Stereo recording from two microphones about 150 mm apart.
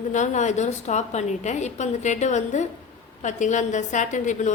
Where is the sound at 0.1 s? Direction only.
55° left (ahead or behind).